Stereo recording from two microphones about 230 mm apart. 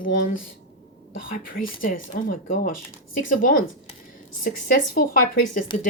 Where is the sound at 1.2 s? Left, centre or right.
Left.